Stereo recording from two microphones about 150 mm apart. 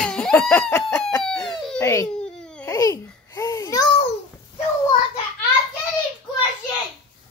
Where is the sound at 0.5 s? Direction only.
15° left (ahead or behind).